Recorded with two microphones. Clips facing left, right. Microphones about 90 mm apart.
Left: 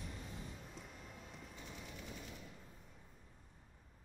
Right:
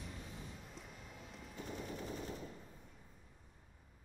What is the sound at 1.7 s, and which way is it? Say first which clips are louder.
Machine gun: right 9 dB; 40° right (ahead or behind).